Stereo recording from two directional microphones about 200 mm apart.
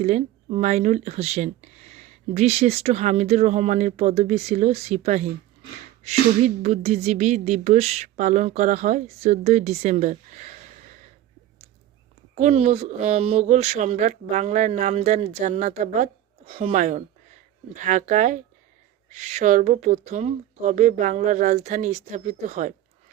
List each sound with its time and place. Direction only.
0.0 s speech: 35° right (ahead or behind)
6.6 s speech: 35° right (ahead or behind)
12.3 s speech: 35° right (ahead or behind)